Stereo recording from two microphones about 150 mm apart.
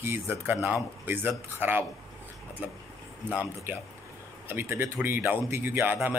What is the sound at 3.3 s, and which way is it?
A man's voice, 15° right (ahead or behind).